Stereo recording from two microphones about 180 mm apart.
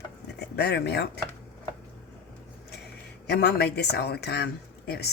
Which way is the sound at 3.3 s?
65° left (ahead or behind).